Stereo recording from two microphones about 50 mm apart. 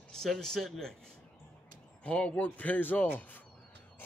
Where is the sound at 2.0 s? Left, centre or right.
Left.